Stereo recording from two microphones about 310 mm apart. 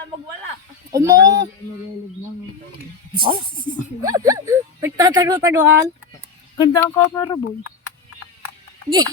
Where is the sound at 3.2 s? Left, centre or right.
Centre.